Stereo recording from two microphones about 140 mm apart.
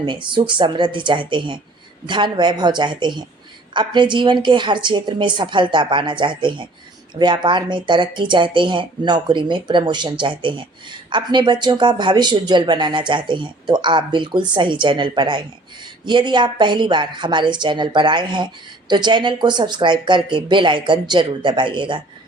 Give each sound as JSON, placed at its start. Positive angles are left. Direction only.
{"t": 0.0, "sound": "speech", "side_deg": -35}